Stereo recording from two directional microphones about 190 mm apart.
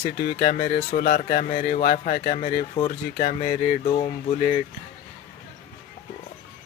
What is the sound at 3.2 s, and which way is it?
Speech, 40° left (ahead or behind).